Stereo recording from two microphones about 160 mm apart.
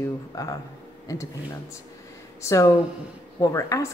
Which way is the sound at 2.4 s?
20° left (ahead or behind).